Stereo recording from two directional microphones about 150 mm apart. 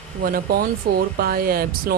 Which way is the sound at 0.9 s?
90° right.